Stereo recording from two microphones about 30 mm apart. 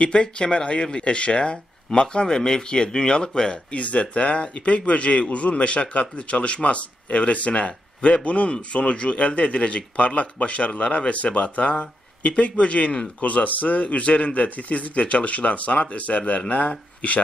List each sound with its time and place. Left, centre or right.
0.0 s speech: left
3.7 s a man's voice: left
8.5 s a man's voice: left
13.2 s a man's voice: left